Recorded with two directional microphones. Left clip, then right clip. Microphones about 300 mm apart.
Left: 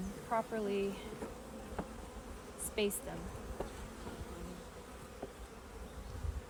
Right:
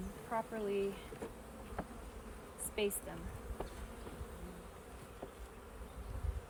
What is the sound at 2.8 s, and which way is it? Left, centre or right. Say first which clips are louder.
Speech: left 1 dB; centre.